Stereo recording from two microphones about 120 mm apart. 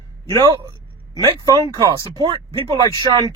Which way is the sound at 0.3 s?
35° right (ahead or behind).